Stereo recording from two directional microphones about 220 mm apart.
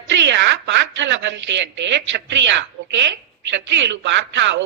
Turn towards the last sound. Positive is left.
turn(degrees=-55)  # may be behind; listen again after turning